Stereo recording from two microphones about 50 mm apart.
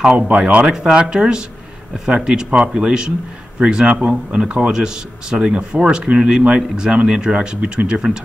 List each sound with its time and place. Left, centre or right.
0.4 s a man's voice: right